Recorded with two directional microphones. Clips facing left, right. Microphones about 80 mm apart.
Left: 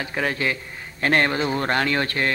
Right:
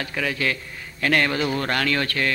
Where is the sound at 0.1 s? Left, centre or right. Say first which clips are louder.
Left 2 dB; left.